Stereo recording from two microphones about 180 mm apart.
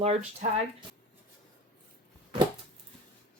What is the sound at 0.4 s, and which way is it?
Speech, 40° right (ahead or behind).